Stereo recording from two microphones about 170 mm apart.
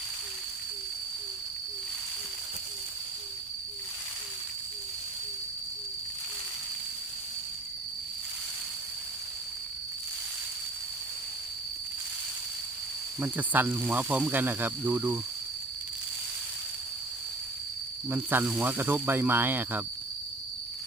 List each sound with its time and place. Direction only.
13.1 s speech: 10° right (ahead or behind)
18.1 s speech: 10° right (ahead or behind)